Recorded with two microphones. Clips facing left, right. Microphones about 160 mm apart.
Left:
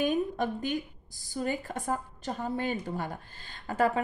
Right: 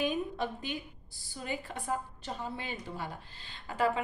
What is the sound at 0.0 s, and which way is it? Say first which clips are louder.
A woman's voice: left 4 dB; 45° left (ahead or behind).